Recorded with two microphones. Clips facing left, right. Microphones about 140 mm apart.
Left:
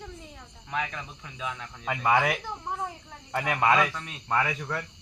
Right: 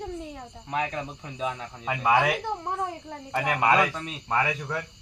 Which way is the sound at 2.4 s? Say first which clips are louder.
Right 4 dB; 60° right (ahead or behind).